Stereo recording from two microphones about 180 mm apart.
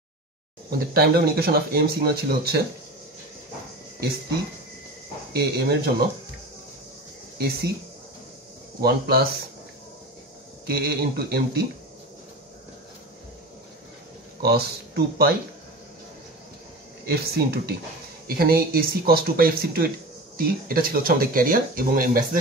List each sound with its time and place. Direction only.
0.7 s speech: 60° right (ahead or behind)
5.3 s speech: 65° right (ahead or behind)
8.8 s speech: 60° right (ahead or behind)
10.7 s speech: 60° right (ahead or behind)
14.4 s speech: 60° right (ahead or behind)
17.0 s speech: 60° right (ahead or behind)